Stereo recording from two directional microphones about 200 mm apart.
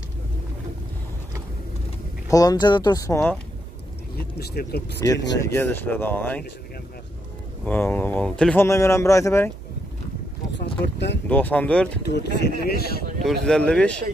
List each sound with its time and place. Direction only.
2.2 s speech: 15° left (ahead or behind)
4.4 s speech: 50° left (ahead or behind)
5.4 s speech: 10° left (ahead or behind)
7.6 s speech: 10° left (ahead or behind)
10.6 s a sound: 60° left (ahead or behind)
11.2 s speech: 10° left (ahead or behind)
12.1 s speech: 55° left (ahead or behind)
13.2 s speech: centre (ahead or behind)